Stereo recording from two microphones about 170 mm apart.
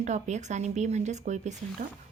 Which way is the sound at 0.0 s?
45° right (ahead or behind).